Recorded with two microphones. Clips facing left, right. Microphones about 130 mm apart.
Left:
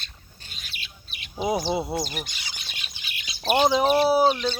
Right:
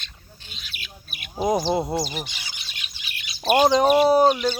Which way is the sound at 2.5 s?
50° left (ahead or behind).